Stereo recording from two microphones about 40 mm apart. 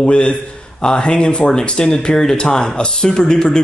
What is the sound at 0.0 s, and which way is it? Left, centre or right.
Speech, left.